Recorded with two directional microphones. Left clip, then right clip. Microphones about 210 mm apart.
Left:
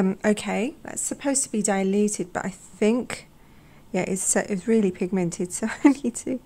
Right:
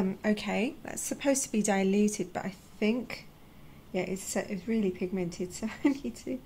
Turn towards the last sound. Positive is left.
turn(degrees=45)  # may be behind; listen again after turning